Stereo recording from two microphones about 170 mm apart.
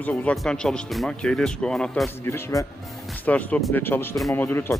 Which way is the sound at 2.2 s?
15° left (ahead or behind).